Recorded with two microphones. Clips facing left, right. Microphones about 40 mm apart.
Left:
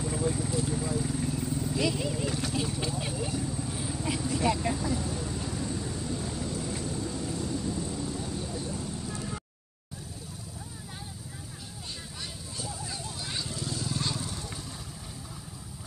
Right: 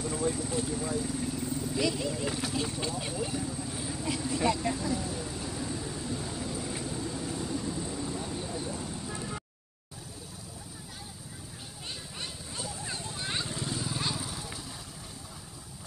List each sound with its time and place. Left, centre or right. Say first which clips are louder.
0.1 s vehicle: even; centre
2.2 s vehicle: left 1 dB; centre
12.5 s vehicle: even; right; by 14.4 s centre